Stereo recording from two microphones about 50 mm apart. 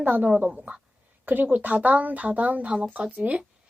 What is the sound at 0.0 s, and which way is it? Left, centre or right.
A woman's voice, right.